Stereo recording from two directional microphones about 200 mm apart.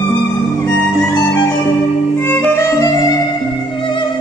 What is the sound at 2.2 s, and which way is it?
Music, 10° left (ahead or behind).